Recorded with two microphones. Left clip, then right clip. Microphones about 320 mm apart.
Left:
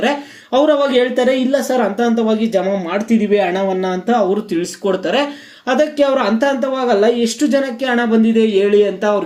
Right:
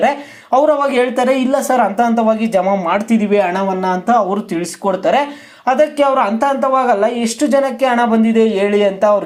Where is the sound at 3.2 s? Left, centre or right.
Centre.